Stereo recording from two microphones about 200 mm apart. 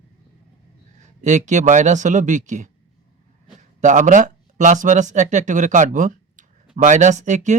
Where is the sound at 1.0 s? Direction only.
35° right (ahead or behind).